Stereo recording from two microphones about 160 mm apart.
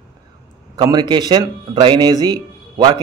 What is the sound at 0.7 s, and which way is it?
A man's voice, 30° right (ahead or behind).